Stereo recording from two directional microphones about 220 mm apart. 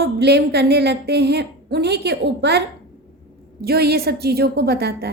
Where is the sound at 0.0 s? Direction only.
50° right (ahead or behind).